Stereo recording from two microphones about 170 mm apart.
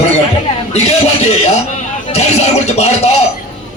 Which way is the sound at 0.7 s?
40° left (ahead or behind).